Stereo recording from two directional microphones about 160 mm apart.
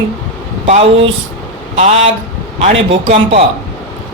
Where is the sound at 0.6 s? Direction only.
35° right (ahead or behind).